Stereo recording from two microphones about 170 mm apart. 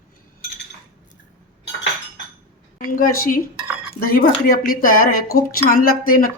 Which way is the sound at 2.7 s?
55° left (ahead or behind).